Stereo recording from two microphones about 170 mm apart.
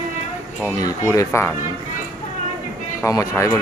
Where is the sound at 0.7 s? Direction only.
20° left (ahead or behind).